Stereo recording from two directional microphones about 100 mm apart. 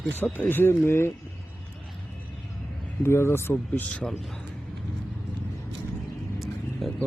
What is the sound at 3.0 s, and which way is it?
Speech, 25° left (ahead or behind).